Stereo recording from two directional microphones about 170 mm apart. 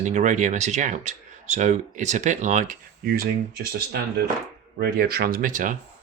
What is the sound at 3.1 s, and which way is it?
Speech, 60° right (ahead or behind).